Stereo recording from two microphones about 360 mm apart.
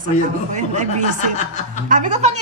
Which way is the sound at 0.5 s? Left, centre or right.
Centre.